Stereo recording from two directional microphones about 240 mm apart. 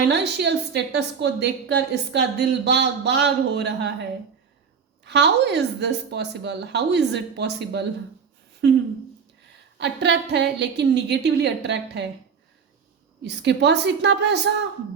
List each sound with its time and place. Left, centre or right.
0.1 s a woman's voice: right
5.0 s a woman's voice: right
9.7 s a woman's voice: right
13.2 s a woman's voice: right